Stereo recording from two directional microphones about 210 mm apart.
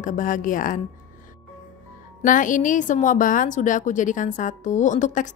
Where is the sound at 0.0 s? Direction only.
40° left (ahead or behind).